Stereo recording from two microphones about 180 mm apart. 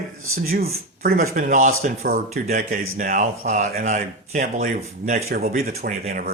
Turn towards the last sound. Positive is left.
turn(degrees=-55)  # may be behind; listen again after turning